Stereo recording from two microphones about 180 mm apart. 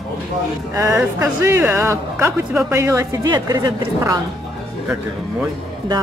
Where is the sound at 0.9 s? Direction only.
15° right (ahead or behind).